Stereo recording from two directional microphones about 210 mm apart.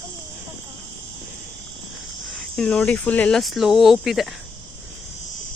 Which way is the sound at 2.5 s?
5° left (ahead or behind).